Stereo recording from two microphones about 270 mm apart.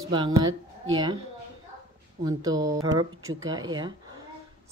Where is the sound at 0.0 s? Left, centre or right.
Centre.